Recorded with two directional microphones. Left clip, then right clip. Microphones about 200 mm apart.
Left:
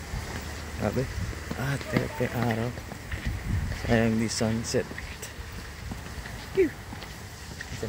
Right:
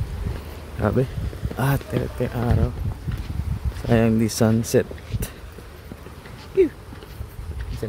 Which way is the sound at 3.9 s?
80° right.